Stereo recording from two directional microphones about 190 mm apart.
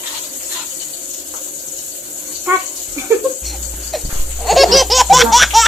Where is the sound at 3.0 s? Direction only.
15° right (ahead or behind).